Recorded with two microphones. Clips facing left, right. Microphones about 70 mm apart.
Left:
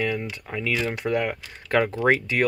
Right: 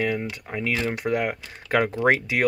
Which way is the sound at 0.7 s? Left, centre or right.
Centre.